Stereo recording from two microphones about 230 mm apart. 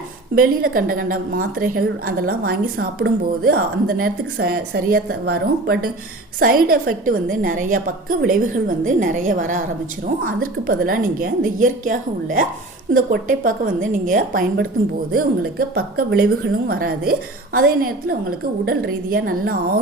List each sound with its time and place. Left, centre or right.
0.3 s a woman's voice: right